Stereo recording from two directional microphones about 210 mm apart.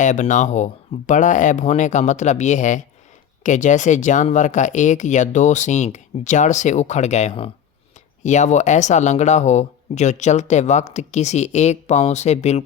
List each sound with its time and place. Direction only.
0.0 s speech: 35° left (ahead or behind)